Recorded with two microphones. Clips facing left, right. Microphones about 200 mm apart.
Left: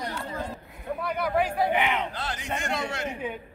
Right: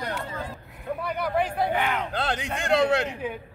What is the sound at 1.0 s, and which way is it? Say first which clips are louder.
Speech: left 1 dB; 5° left (ahead or behind).